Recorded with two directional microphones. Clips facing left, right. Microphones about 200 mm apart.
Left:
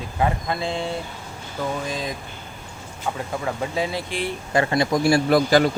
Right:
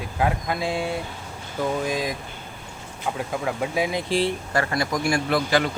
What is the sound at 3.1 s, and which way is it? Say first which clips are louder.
Speech: right 2 dB; 5° right (ahead or behind).